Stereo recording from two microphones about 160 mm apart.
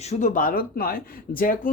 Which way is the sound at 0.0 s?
45° left (ahead or behind).